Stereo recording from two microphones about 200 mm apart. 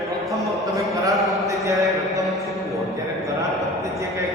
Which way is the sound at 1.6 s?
15° right (ahead or behind).